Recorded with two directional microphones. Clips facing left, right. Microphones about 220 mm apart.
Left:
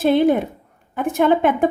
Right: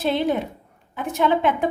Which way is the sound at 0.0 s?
50° left (ahead or behind).